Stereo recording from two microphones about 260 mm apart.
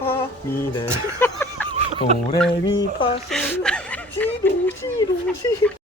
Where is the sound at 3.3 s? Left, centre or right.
Centre.